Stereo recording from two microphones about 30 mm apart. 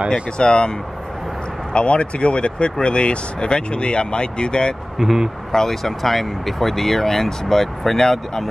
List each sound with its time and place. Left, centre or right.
0.1 s speech: left
4.9 s speech: centre
5.5 s speech: centre